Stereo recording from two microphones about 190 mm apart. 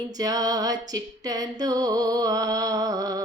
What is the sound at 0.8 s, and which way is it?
Speech, 20° right (ahead or behind).